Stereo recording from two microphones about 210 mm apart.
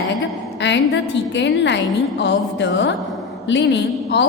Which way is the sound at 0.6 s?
55° left (ahead or behind).